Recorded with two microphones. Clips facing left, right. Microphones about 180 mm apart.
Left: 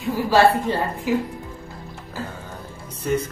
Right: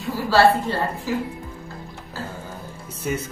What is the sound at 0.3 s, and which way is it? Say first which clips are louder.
Speech: even; 15° left (ahead or behind).